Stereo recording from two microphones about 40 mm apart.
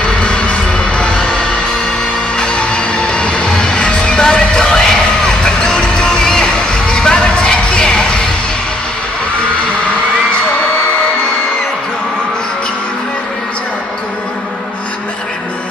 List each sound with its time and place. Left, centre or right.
0.0 s music: left